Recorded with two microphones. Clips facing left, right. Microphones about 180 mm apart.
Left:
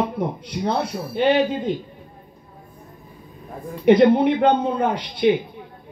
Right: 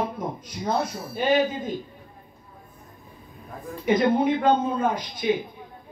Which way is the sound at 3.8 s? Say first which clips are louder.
Left 7 dB; 70° left (ahead or behind).